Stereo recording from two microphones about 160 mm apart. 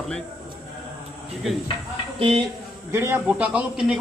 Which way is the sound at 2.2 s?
35° right (ahead or behind).